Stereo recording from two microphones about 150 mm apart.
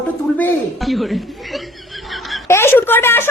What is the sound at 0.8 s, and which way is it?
Chuckle, centre (ahead or behind).